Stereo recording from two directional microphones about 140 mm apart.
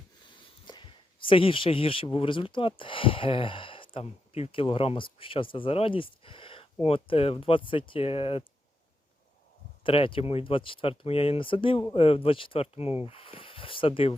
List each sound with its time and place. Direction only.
0.7 s speech: 35° left (ahead or behind)
9.8 s speech: 40° left (ahead or behind)